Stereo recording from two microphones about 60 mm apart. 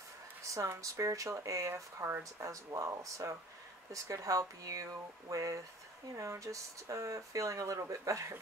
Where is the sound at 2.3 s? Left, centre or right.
Right.